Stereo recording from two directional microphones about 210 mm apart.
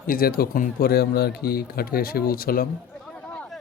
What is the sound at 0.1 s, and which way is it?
A man's voice, 45° left (ahead or behind).